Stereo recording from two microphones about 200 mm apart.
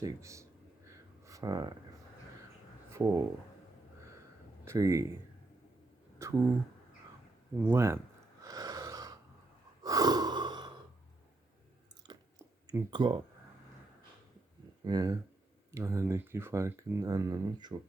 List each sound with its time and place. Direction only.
0.0 s speech: 15° right (ahead or behind)
0.9 s a sound: 15° right (ahead or behind)
2.9 s speech: 15° right (ahead or behind)
4.6 s speech: 15° right (ahead or behind)
6.2 s a sound: 15° right (ahead or behind)
7.6 s speech: 10° right (ahead or behind)
8.4 s gasp: 20° right (ahead or behind)
12.1 s chewing: 20° right (ahead or behind)
12.6 s speech: 20° right (ahead or behind)
14.8 s speech: 20° right (ahead or behind)